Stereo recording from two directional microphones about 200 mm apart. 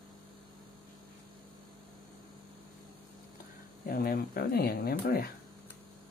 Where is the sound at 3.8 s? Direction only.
45° left (ahead or behind).